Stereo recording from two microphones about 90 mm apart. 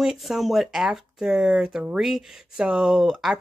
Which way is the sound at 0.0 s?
5° right (ahead or behind).